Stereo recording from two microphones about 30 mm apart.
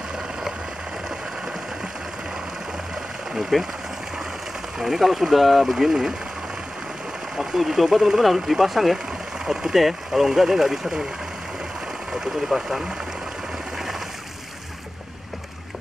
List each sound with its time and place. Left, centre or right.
3.3 s speech: centre
4.7 s speech: centre
7.3 s speech: centre
8.9 s vehicle: centre
9.8 s speech: centre
12.1 s speech: centre
13.7 s a sound: centre